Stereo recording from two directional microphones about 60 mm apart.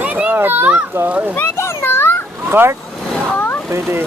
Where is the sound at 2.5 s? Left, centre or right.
Right.